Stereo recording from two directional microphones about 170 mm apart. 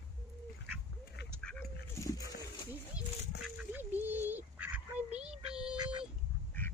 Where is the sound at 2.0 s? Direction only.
20° left (ahead or behind).